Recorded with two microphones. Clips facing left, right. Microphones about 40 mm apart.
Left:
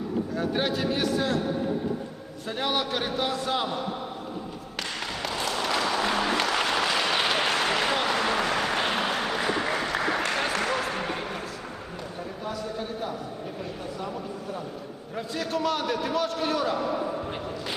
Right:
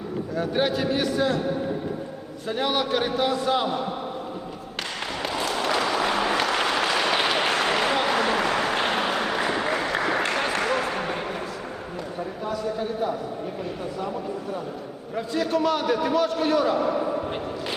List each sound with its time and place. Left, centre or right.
0.3 s a man's voice: centre
2.5 s a man's voice: centre
5.2 s a sound: centre
6.5 s applause: centre
9.8 s a sound: centre
15.1 s a man's voice: centre